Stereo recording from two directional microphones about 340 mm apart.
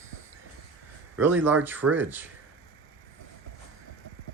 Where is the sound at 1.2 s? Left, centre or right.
Centre.